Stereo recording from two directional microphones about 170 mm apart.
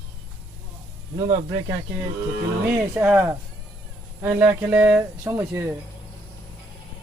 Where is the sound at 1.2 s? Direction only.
30° right (ahead or behind).